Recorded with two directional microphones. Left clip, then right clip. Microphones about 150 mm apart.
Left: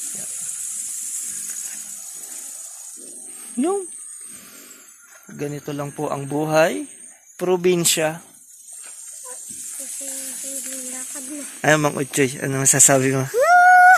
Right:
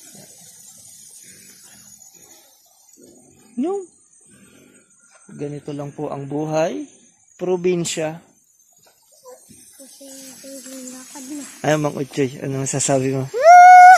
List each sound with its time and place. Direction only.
5.4 s speech: 10° left (ahead or behind)
11.6 s speech: 10° right (ahead or behind)
11.9 s speech: centre (ahead or behind)
13.4 s a sound: 30° right (ahead or behind)